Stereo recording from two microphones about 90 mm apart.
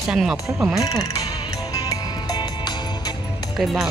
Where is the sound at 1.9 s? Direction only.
50° left (ahead or behind).